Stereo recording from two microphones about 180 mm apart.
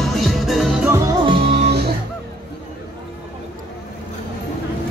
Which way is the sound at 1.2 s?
30° right (ahead or behind).